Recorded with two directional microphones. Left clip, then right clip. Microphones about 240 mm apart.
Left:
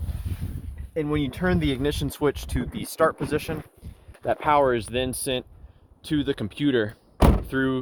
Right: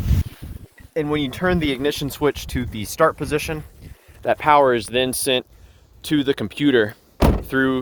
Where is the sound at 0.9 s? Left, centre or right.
Right.